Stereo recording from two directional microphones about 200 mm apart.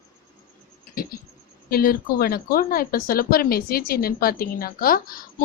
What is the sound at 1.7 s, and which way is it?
A woman's voice, 50° left (ahead or behind).